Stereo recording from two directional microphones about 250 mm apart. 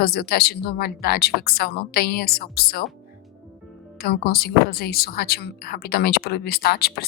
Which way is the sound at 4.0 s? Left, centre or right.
Left.